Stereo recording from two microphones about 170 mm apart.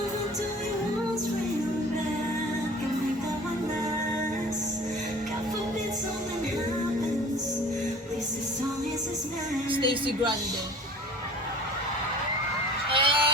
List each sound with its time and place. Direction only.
9.7 s speech: 30° right (ahead or behind)
12.9 s vehicle: 30° right (ahead or behind)